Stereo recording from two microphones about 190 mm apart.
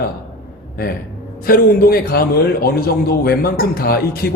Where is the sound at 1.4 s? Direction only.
50° left (ahead or behind).